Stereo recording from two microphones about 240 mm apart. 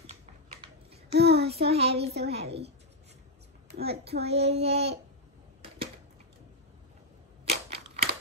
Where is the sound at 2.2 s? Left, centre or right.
Right.